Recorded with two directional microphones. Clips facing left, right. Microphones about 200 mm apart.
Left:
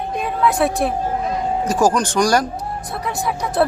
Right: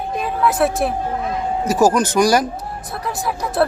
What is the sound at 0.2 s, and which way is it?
A woman's voice, centre (ahead or behind).